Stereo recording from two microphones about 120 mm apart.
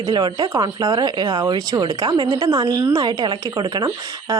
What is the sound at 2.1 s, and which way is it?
Speech, 45° right (ahead or behind).